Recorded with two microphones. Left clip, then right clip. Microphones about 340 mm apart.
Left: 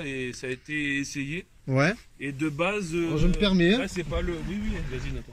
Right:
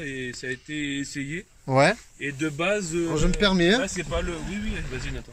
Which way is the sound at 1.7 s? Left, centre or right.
Centre.